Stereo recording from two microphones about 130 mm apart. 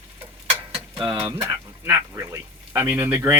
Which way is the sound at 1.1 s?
15° right (ahead or behind).